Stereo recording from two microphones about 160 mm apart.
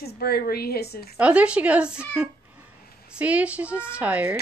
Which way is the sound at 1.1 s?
10° right (ahead or behind).